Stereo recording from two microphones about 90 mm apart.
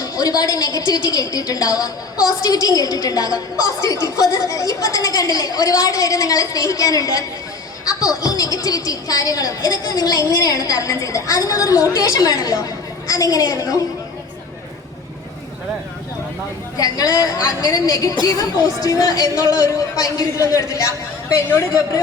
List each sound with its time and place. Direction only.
0.0 s a woman's voice: 45° left (ahead or behind)
16.7 s a woman's voice: 40° left (ahead or behind)